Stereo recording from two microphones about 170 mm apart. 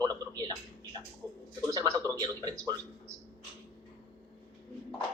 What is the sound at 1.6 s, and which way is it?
A man's voice, 20° right (ahead or behind).